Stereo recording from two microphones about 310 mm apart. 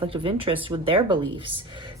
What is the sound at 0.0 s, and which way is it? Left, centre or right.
Speech, centre.